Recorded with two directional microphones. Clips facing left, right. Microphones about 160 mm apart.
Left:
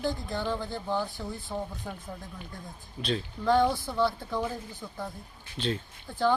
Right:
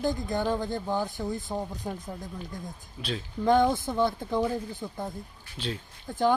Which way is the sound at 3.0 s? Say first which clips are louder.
Left 4 dB; 10° right (ahead or behind).